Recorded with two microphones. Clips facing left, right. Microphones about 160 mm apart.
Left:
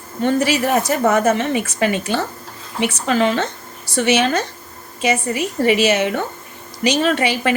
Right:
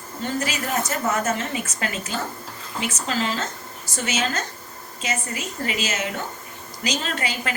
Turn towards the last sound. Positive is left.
turn(degrees=75)  # may be behind; listen again after turning